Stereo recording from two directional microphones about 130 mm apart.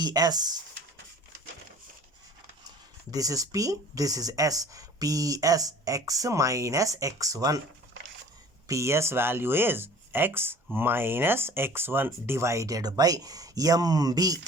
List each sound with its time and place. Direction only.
0.0 s speech: 30° right (ahead or behind)
3.1 s speech: 25° right (ahead or behind)
8.6 s speech: 25° right (ahead or behind)